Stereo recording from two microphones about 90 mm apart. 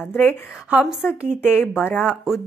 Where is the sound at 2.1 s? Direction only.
5° right (ahead or behind).